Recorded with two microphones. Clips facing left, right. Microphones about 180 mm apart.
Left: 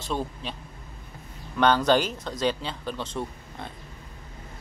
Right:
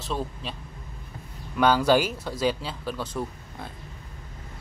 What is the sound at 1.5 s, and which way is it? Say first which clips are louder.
Speech: right 1 dB; 5° right (ahead or behind).